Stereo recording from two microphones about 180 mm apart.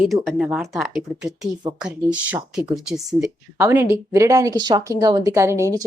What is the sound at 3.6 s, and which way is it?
Speech, 15° right (ahead or behind).